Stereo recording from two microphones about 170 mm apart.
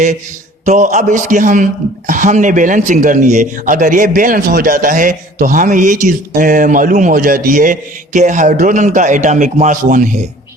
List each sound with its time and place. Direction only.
0.6 s a man's voice: 45° right (ahead or behind)